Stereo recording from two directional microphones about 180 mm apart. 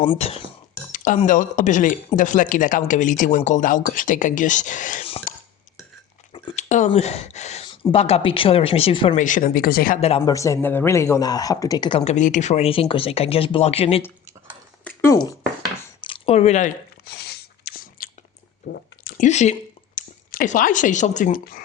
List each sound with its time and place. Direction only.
0.1 s speech: 35° left (ahead or behind)
0.7 s a woman's voice: 50° left (ahead or behind)
5.3 s burping: 45° left (ahead or behind)
6.6 s speech: 45° left (ahead or behind)
9.1 s a woman's voice: 45° left (ahead or behind)
10.0 s speech: 30° left (ahead or behind)
10.3 s speech: 15° left (ahead or behind); by 14.0 s 35° left (ahead or behind)
14.8 s speech: 15° left (ahead or behind)
16.0 s a sound: 30° left (ahead or behind)
17.1 s a sound: 65° left (ahead or behind)
18.7 s squish: 50° left (ahead or behind)
20.0 s speech: 45° left (ahead or behind)